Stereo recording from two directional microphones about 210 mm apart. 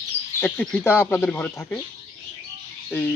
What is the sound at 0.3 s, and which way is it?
Speech, 10° left (ahead or behind).